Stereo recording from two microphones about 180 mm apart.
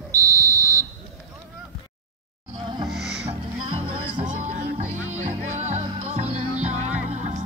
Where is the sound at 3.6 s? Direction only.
30° right (ahead or behind).